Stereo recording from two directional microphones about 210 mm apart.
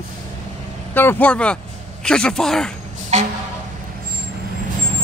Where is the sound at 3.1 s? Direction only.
35° right (ahead or behind).